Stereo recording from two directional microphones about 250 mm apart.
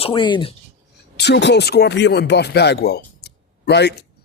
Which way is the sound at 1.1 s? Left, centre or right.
Left.